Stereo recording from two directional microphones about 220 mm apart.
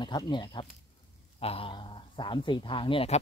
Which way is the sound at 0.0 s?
20° left (ahead or behind).